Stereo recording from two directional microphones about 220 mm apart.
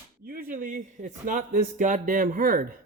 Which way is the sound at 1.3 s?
35° right (ahead or behind).